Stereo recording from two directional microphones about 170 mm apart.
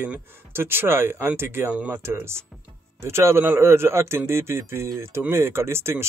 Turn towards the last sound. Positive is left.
turn(degrees=-15)  # may be behind; listen again after turning